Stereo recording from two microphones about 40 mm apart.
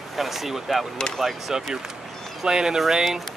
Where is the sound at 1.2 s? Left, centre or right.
Centre.